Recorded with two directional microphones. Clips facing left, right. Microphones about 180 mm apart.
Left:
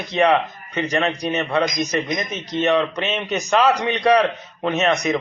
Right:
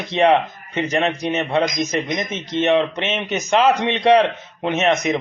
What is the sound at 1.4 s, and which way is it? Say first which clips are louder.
Speech: right 1 dB; 30° right (ahead or behind).